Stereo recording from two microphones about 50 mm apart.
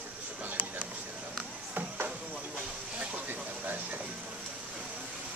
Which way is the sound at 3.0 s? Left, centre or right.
Right.